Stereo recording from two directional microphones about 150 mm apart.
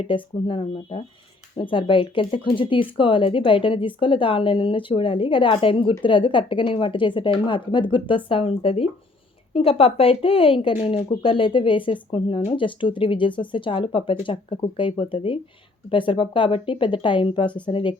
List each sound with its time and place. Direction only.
0.0 s a woman's voice: 35° left (ahead or behind)